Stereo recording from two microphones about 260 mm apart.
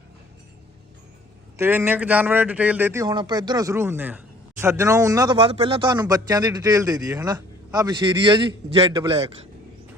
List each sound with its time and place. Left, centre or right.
1.5 s speech: centre